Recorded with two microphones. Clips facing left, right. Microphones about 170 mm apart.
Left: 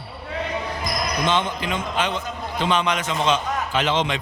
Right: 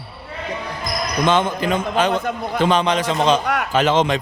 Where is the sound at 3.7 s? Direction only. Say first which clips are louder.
Right 6 dB; 45° right (ahead or behind).